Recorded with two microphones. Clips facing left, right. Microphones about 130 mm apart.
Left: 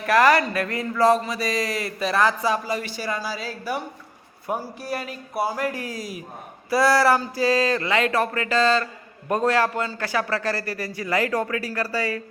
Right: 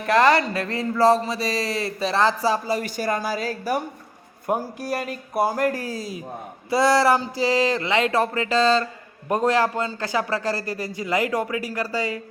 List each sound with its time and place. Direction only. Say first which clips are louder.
0.0 s speech: even; 25° right (ahead or behind); by 5.8 s 45° right (ahead or behind)
5.8 s speech: right 2 dB; 30° right (ahead or behind)